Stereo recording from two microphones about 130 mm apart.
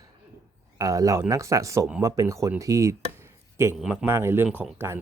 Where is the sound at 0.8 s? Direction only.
25° right (ahead or behind).